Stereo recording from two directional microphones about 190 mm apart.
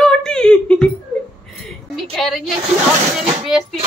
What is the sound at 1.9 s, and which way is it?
Speech, centre (ahead or behind).